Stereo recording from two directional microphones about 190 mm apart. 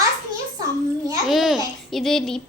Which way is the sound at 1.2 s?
Centre (ahead or behind).